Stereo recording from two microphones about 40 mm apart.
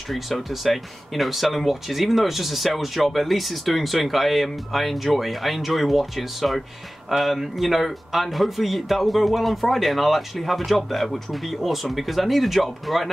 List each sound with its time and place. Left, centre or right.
0.1 s speech: centre